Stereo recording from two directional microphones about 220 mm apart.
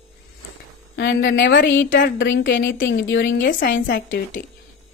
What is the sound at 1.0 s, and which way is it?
A woman's voice, 50° left (ahead or behind).